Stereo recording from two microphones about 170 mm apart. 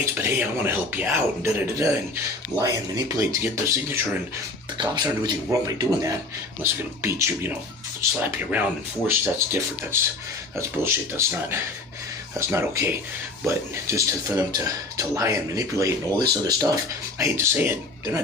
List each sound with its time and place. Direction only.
0.0 s speech: 15° right (ahead or behind)
3.2 s speech: 15° right (ahead or behind)